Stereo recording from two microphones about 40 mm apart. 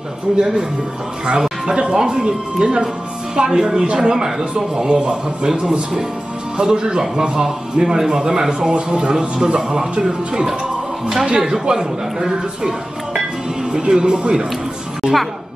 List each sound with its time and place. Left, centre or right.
0.4 s a man's voice: centre
1.7 s a man's voice: right
3.8 s speech: right
4.1 s a man's voice: centre